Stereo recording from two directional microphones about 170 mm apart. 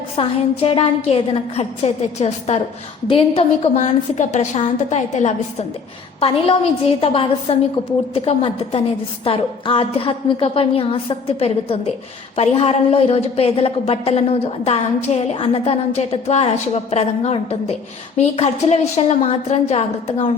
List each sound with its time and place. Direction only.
0.2 s a woman's voice: 35° left (ahead or behind)